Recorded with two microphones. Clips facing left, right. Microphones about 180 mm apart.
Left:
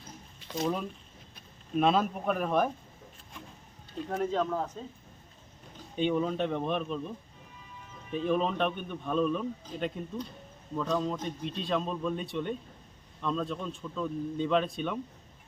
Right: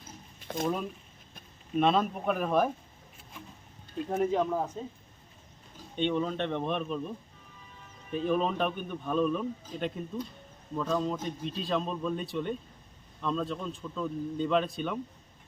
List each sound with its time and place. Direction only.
0.3 s a sound: 50° right (ahead or behind)
1.7 s a man's voice: centre (ahead or behind)
4.1 s speech: 10° right (ahead or behind)
6.0 s a man's voice: 5° left (ahead or behind)
8.3 s a man's voice: centre (ahead or behind)